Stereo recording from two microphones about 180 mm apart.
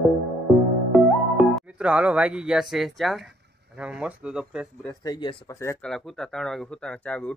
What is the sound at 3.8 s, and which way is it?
Speech, 5° right (ahead or behind).